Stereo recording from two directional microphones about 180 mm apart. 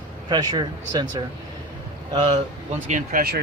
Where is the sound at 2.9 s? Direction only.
50° right (ahead or behind).